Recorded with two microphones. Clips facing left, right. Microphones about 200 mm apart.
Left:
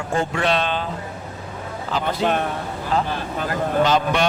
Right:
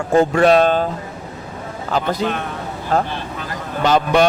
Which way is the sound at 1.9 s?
45° right (ahead or behind).